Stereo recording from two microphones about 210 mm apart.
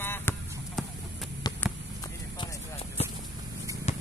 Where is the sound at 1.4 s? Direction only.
20° left (ahead or behind).